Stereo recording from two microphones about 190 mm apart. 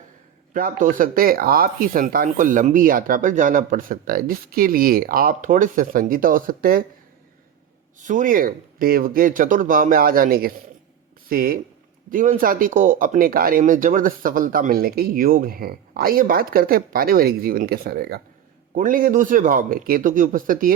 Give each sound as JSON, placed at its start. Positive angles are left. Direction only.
{"t": 0.5, "sound": "speech", "side_deg": -45}
{"t": 7.9, "sound": "speech", "side_deg": -40}